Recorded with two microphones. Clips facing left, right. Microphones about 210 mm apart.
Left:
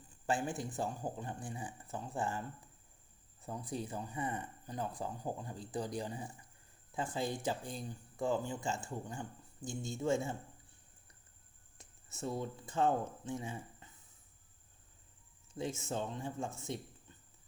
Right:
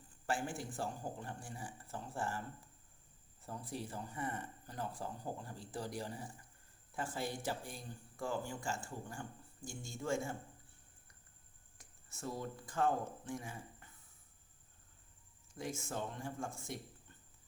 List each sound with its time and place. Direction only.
0.3 s speech: 20° left (ahead or behind)
3.4 s speech: 20° left (ahead or behind)
11.8 s speech: 25° left (ahead or behind)
15.5 s speech: 25° left (ahead or behind)